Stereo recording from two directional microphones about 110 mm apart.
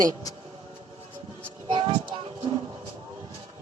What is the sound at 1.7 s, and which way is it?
Child singing, 50° right (ahead or behind).